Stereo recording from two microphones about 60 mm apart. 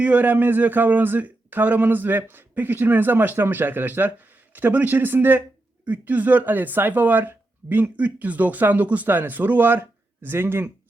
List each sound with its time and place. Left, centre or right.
0.0 s speech: right